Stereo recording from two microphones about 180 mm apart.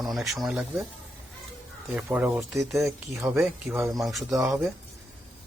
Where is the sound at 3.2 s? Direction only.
15° right (ahead or behind).